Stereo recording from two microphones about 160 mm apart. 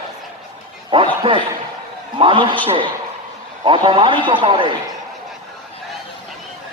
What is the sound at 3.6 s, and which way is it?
A man's voice, 30° right (ahead or behind).